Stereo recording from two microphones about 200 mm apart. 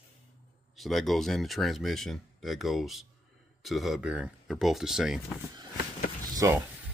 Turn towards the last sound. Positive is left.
turn(degrees=-15)  # may be behind; listen again after turning